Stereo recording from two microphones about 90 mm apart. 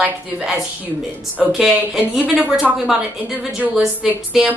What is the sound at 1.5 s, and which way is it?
A woman's voice, 5° right (ahead or behind).